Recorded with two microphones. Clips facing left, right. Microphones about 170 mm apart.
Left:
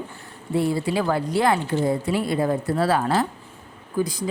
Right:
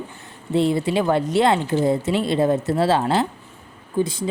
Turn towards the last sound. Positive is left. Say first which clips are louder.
# right 2 dB
turn(degrees=-25)  # may be behind; listen again after turning